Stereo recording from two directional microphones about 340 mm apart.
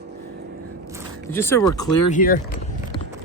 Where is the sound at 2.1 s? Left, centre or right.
Left.